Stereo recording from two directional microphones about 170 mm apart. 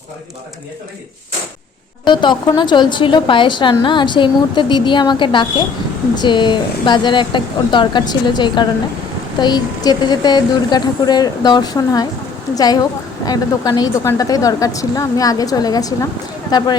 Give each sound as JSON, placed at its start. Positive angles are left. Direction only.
{"t": 2.0, "sound": "a woman's voice", "side_deg": 25}